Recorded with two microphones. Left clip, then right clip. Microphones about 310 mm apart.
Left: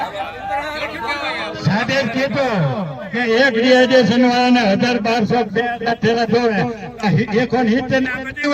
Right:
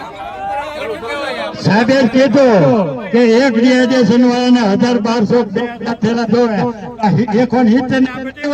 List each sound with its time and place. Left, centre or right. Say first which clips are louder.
1.6 s a man's voice: right 7 dB; right